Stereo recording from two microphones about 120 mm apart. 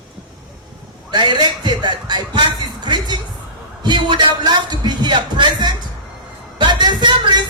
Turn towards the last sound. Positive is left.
turn(degrees=-40)  # may be behind; listen again after turning